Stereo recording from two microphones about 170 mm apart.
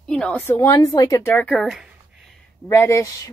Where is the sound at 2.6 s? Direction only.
15° left (ahead or behind).